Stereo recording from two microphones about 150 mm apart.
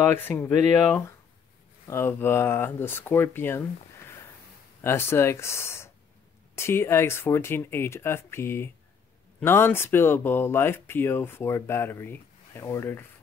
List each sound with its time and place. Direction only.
0.1 s speech: 15° left (ahead or behind)
4.8 s speech: 15° left (ahead or behind)